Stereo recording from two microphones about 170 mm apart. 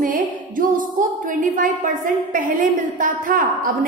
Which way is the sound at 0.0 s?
55° right (ahead or behind).